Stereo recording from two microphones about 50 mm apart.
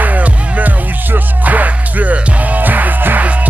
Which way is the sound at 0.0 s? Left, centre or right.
Right.